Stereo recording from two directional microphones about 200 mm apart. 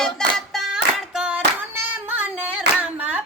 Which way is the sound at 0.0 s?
Centre (ahead or behind).